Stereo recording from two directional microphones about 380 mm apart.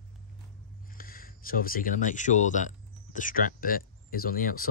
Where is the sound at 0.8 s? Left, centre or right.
Left.